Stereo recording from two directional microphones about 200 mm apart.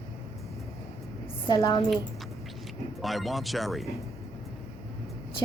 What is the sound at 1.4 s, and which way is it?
Speech, 20° left (ahead or behind).